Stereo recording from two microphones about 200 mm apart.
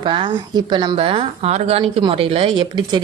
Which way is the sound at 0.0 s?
25° right (ahead or behind).